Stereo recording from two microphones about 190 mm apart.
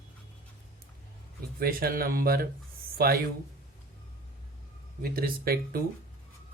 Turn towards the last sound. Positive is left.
turn(degrees=-50)  # may be behind; listen again after turning